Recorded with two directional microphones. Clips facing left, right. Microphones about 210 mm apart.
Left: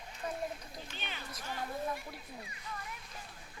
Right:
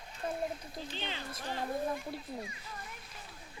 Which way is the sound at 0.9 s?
25° right (ahead or behind).